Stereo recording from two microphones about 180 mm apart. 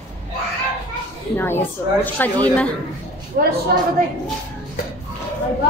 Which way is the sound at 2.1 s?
10° left (ahead or behind).